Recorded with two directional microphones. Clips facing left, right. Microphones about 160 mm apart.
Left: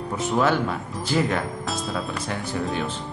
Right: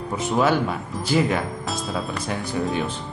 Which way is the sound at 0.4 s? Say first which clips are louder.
Right 2 dB; 15° right (ahead or behind).